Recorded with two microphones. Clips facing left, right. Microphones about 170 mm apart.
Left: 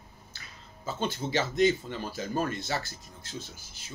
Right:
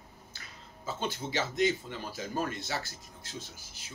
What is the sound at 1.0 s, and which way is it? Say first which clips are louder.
Speech: left 4 dB; 10° right (ahead or behind).